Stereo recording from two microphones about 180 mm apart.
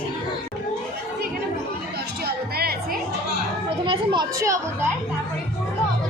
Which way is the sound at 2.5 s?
60° right (ahead or behind).